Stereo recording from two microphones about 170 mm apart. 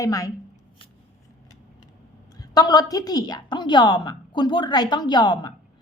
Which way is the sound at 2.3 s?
20° left (ahead or behind).